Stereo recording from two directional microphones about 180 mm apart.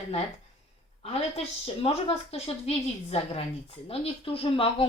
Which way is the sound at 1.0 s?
35° left (ahead or behind).